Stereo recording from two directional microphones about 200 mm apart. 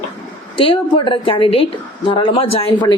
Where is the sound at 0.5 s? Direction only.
25° left (ahead or behind).